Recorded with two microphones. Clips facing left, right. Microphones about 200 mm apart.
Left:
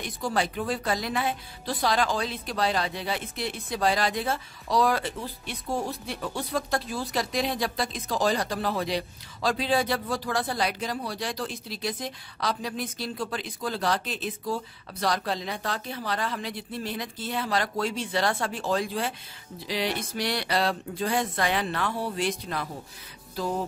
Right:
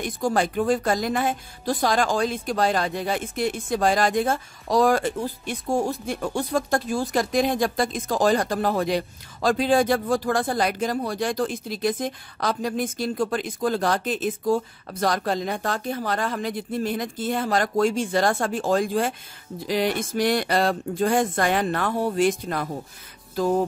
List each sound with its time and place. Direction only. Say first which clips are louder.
0.0 s speech: right 5 dB; 50° right (ahead or behind)
23.3 s music: right 8 dB; 50° right (ahead or behind)